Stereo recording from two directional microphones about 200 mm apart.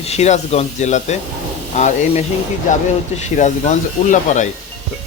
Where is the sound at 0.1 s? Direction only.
35° left (ahead or behind).